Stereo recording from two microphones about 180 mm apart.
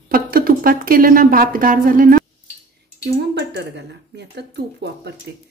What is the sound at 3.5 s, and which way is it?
Speech, 70° right (ahead or behind).